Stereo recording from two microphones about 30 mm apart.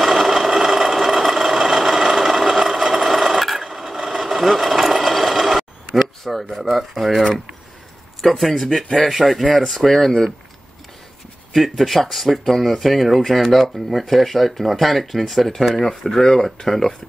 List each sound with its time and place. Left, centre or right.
0.0 s sewing machine: centre
5.6 s a sound: centre
7.2 s speech: centre
12.0 s speech: centre
16.0 s speech: centre